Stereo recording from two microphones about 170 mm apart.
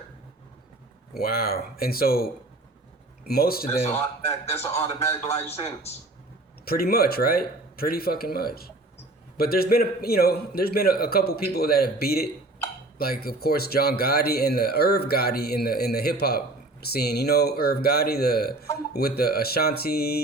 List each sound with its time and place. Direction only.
1.2 s speech: 60° left (ahead or behind)
3.9 s a man's voice: 15° left (ahead or behind)
6.7 s speech: 65° left (ahead or behind)